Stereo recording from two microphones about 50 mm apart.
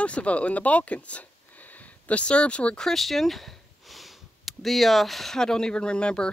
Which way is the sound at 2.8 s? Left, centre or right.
Centre.